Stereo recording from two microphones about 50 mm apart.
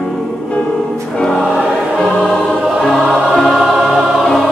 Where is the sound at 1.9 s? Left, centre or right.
Centre.